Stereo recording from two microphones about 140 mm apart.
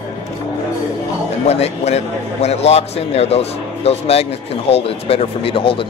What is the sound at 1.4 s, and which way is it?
Speech, 50° left (ahead or behind).